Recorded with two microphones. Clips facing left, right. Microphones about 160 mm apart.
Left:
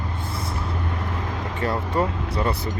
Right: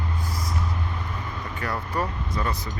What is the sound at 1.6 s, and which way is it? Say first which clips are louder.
Speech: left 5 dB; 25° left (ahead or behind).